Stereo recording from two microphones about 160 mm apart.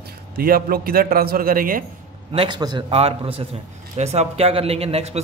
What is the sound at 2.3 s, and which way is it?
A man's voice, 30° right (ahead or behind).